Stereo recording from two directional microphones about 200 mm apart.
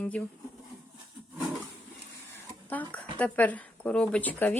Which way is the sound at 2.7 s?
10° left (ahead or behind).